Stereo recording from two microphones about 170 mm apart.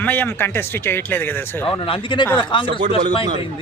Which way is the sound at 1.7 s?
30° left (ahead or behind).